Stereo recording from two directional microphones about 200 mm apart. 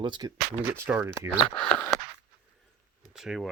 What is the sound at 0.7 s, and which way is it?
Speech, 10° right (ahead or behind).